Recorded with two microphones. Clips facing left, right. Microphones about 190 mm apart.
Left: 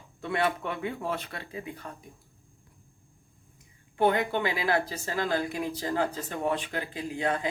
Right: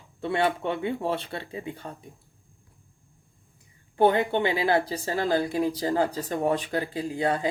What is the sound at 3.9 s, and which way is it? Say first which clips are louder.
Speech: right 4 dB; 30° right (ahead or behind).